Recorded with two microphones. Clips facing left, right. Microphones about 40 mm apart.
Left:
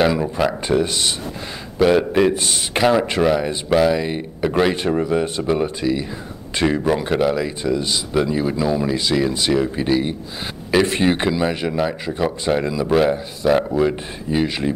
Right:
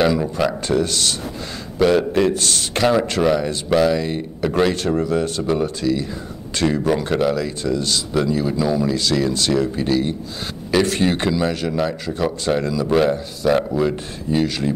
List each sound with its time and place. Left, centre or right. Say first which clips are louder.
0.0 s speech: even; centre
6.9 s speech: even; centre